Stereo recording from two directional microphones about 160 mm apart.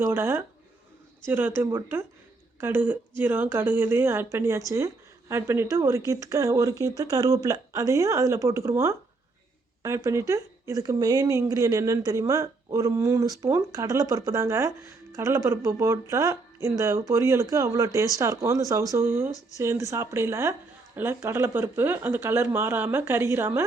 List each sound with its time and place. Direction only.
0.0 s a woman's voice: 15° right (ahead or behind)